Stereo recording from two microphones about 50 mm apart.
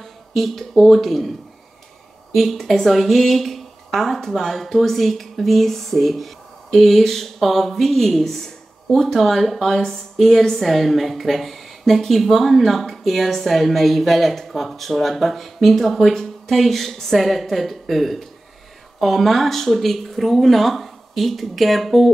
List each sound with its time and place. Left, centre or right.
0.0 s speech: centre
2.3 s a woman's voice: centre